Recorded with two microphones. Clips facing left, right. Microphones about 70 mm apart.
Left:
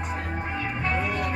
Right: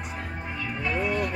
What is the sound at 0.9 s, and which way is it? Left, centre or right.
Music, centre.